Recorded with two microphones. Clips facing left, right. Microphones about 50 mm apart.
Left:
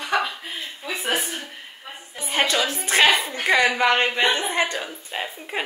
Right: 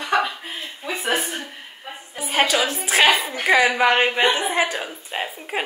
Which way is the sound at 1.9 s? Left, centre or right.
Centre.